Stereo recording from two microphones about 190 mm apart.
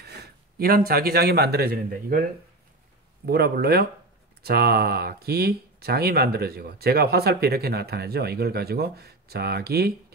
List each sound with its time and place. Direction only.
0.0 s speech: 60° right (ahead or behind)
3.3 s speech: 55° right (ahead or behind)